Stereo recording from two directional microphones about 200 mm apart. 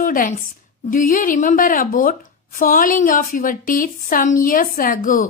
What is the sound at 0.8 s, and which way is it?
A woman's voice, 45° left (ahead or behind).